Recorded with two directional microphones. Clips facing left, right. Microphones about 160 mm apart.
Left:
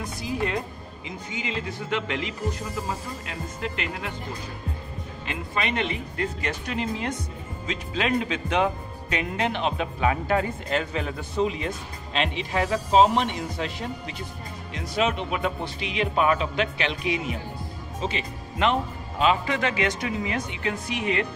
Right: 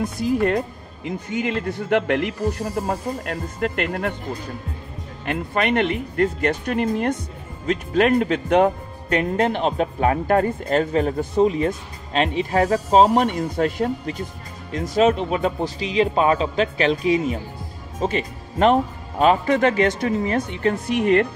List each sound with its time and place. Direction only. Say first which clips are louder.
0.2 s speech: right 8 dB; 50° right (ahead or behind)
5.2 s speech: right 7 dB; 55° right (ahead or behind)